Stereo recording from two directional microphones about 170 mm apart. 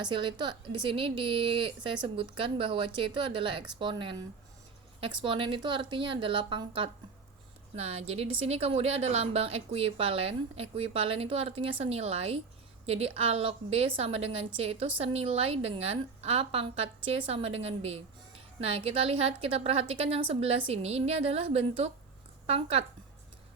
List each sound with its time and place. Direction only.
0.0 s a woman's voice: 30° right (ahead or behind)